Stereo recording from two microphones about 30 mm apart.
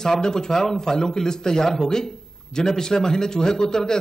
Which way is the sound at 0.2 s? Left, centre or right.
Left.